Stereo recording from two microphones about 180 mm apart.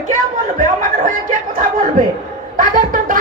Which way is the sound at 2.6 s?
45° right (ahead or behind).